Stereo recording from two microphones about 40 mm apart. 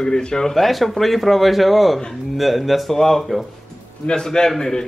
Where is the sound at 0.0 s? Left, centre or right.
Centre.